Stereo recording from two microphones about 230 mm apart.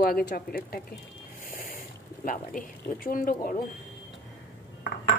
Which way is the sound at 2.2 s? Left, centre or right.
Left.